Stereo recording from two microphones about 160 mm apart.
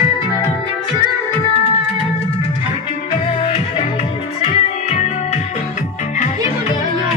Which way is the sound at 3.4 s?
40° left (ahead or behind).